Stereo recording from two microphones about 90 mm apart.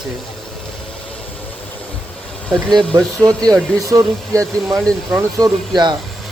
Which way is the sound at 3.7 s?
40° right (ahead or behind).